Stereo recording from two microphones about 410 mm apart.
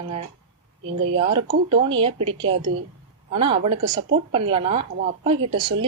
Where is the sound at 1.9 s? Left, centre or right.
Centre.